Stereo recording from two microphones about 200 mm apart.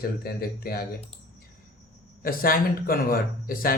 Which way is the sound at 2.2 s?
45° left (ahead or behind).